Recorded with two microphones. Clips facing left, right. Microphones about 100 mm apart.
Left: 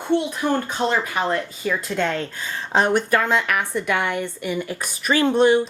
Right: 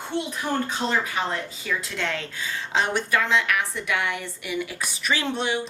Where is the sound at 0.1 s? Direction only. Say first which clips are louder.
Left 6 dB; 55° left (ahead or behind).